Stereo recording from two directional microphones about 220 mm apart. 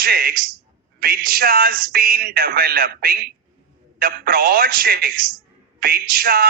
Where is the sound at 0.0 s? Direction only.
45° right (ahead or behind).